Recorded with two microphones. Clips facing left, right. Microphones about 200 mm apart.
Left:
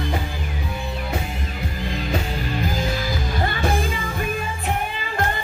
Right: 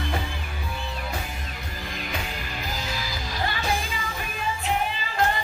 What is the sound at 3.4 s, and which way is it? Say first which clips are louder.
Music: left 4 dB; 50° left (ahead or behind).